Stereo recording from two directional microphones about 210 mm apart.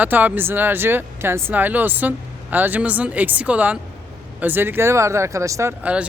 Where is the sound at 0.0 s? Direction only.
10° right (ahead or behind).